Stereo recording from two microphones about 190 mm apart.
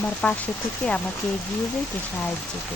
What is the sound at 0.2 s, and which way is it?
Speech, 5° left (ahead or behind).